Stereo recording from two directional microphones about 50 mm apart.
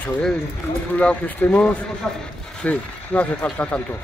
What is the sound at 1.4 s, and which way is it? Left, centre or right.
Speech, left.